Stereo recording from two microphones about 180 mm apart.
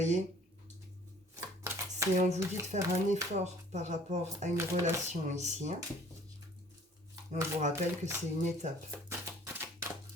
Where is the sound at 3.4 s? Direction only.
40° right (ahead or behind).